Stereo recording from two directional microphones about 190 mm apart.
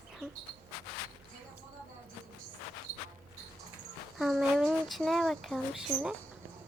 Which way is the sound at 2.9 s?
20° left (ahead or behind).